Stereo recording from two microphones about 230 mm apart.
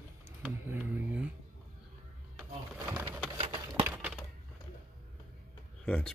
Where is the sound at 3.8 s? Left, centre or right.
Centre.